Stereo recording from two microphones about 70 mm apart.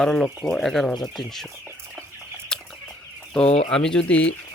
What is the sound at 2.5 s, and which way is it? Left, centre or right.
Chicken, centre.